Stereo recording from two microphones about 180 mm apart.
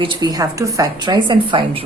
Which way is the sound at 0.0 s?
25° right (ahead or behind).